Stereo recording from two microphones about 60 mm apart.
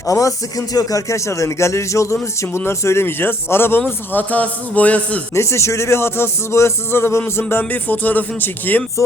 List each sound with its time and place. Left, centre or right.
0.0 s speech: left
2.4 s a man's voice: left
5.3 s music: left
7.7 s speech: left